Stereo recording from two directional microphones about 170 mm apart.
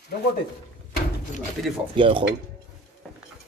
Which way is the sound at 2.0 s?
30° right (ahead or behind).